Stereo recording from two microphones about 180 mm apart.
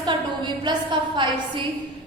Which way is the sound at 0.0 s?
25° right (ahead or behind).